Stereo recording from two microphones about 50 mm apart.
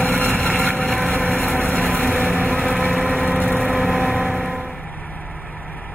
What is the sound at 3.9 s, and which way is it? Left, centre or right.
Vehicle, right.